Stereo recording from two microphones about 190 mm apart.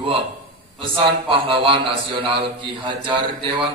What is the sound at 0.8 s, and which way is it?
Mantra, 25° right (ahead or behind).